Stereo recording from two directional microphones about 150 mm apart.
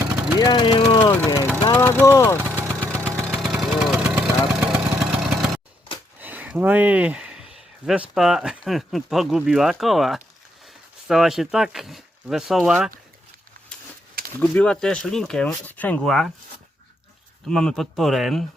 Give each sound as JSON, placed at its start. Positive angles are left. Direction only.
{"t": 0.0, "sound": "vehicle", "side_deg": -15}
{"t": 0.3, "sound": "speech", "side_deg": 30}
{"t": 1.7, "sound": "vehicle", "side_deg": 15}
{"t": 2.4, "sound": "vehicle", "side_deg": -15}
{"t": 2.8, "sound": "vehicle", "side_deg": 10}
{"t": 6.1, "sound": "a sound", "side_deg": -10}
{"t": 8.1, "sound": "speech", "side_deg": -5}
{"t": 13.7, "sound": "a sound", "side_deg": 5}
{"t": 14.3, "sound": "speech", "side_deg": 10}
{"t": 17.4, "sound": "speech", "side_deg": 5}